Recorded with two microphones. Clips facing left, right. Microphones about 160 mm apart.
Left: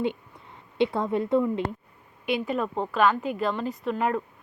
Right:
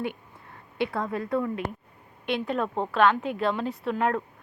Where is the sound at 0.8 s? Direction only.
20° left (ahead or behind).